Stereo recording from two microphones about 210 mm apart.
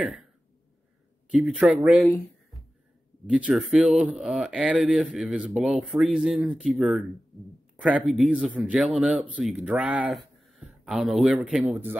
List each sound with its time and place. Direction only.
1.3 s a man's voice: centre (ahead or behind)
3.3 s a man's voice: 5° right (ahead or behind)